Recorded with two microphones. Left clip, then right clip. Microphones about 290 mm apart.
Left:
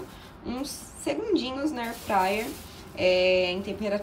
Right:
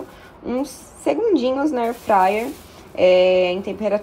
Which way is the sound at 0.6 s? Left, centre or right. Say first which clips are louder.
Right 9 dB; centre.